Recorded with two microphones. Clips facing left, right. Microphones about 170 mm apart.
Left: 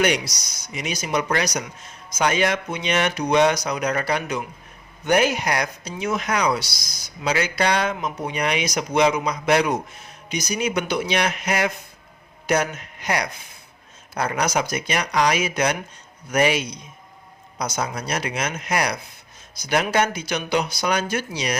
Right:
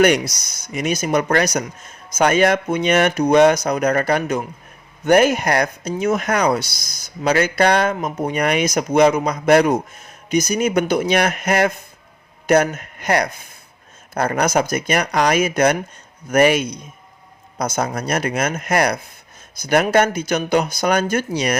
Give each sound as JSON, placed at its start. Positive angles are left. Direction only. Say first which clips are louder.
{"t": 0.0, "sound": "speech", "louder": "right 6 dB", "side_deg": -50}